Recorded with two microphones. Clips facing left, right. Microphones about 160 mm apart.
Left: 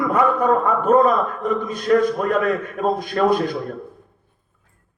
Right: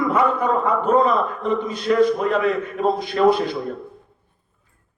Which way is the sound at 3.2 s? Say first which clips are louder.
Right 3 dB; 50° left (ahead or behind).